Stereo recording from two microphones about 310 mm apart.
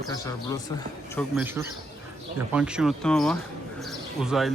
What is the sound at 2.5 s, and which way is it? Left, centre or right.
Speech, centre.